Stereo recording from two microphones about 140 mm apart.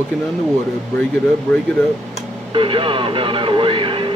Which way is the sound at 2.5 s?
40° right (ahead or behind).